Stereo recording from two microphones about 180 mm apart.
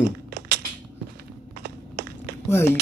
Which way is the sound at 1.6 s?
65° right (ahead or behind).